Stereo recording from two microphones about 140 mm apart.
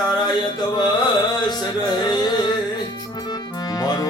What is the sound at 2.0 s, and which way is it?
Music, 30° left (ahead or behind).